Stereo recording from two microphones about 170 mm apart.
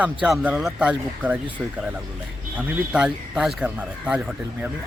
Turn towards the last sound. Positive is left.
turn(degrees=-5)  # may be behind; listen again after turning